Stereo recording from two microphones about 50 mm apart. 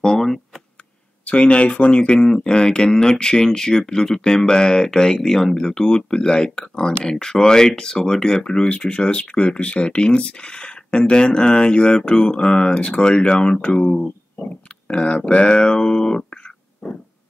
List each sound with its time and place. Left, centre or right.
0.0 s a sound: centre
1.2 s speech: left
14.9 s speech: left